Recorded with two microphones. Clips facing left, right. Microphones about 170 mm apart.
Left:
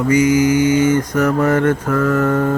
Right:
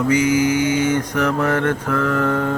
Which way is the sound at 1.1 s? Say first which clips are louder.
Left 4 dB; 10° left (ahead or behind).